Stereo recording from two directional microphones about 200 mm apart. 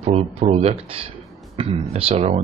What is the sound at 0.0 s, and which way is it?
Speech, 30° right (ahead or behind).